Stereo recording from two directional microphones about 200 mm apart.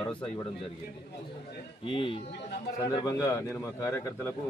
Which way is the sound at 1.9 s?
25° left (ahead or behind).